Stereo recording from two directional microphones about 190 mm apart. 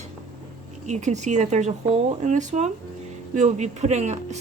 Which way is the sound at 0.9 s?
35° right (ahead or behind).